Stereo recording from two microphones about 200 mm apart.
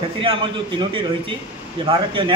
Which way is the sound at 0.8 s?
25° right (ahead or behind).